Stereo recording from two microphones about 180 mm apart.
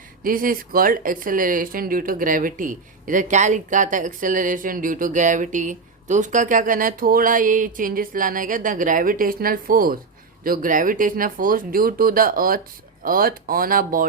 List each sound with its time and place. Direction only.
0.2 s speech: 50° right (ahead or behind)